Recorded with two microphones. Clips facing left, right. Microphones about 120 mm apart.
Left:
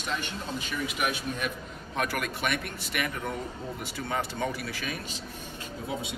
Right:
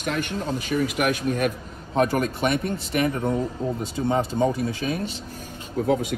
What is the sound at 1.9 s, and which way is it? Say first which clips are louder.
Speech: right 9 dB; 35° right (ahead or behind).